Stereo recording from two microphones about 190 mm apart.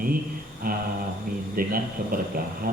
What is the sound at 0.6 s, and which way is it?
Speech, 50° right (ahead or behind).